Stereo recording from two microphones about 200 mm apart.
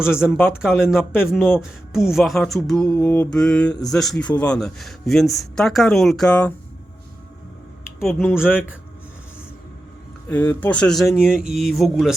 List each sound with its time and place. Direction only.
0.3 s speech: 10° left (ahead or behind)
0.9 s a man's voice: centre (ahead or behind)
8.0 s speech: 5° left (ahead or behind)
10.2 s a man's voice: 10° left (ahead or behind)